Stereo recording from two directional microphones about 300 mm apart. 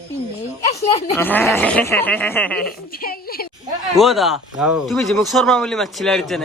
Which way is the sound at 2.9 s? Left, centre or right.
Left.